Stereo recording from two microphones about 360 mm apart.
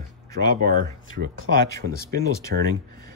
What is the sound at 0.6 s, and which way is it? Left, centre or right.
Speech, right.